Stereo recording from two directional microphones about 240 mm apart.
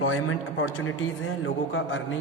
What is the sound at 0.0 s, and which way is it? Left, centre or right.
Speech, left.